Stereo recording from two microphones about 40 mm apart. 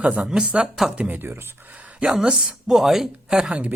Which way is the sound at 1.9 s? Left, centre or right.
Right.